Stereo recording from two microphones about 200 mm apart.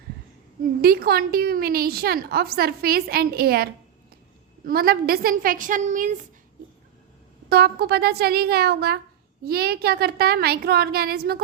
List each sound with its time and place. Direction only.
0.8 s a woman's voice: 50° right (ahead or behind)
7.5 s a woman's voice: 50° right (ahead or behind)